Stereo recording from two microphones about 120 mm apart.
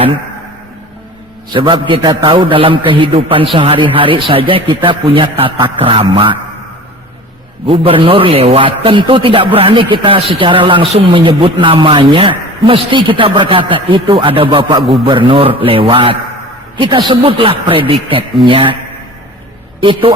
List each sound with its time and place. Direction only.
1.5 s a man's voice: 40° right (ahead or behind)
7.7 s a man's voice: 50° right (ahead or behind)
19.8 s a man's voice: 45° right (ahead or behind)